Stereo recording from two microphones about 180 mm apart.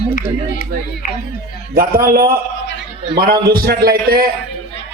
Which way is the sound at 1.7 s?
55° right (ahead or behind).